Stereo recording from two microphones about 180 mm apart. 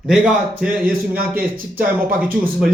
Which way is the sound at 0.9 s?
55° right (ahead or behind).